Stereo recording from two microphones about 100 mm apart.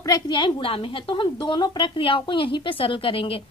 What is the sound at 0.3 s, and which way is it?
A woman's voice, 55° left (ahead or behind).